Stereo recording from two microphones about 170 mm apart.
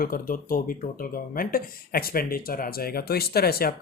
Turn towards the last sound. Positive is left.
turn(degrees=65)  # may be behind; listen again after turning